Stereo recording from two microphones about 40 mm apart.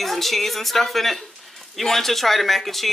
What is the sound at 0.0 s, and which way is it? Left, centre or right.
Speech, centre.